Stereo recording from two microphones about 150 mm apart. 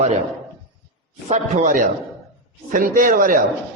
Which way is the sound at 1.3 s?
60° right (ahead or behind).